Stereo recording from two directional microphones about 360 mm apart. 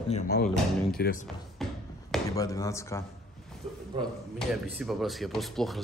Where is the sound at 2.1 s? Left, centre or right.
Centre.